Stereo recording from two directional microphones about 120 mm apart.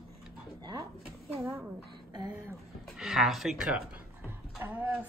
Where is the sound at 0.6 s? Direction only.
35° right (ahead or behind).